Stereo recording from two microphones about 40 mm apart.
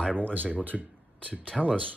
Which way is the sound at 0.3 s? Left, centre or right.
Right.